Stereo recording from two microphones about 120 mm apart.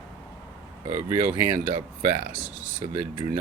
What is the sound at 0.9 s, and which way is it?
Speech, 20° right (ahead or behind).